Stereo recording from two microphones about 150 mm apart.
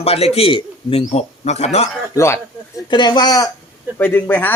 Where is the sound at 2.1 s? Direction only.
20° left (ahead or behind).